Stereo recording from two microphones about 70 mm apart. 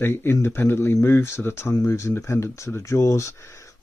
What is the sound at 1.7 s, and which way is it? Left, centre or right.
Speech, left.